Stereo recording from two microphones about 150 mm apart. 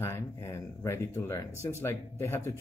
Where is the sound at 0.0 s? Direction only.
20° left (ahead or behind).